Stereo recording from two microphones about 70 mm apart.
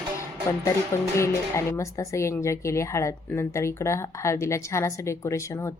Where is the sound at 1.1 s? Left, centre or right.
Left.